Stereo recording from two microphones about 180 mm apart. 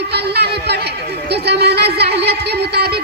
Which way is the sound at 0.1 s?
65° right (ahead or behind).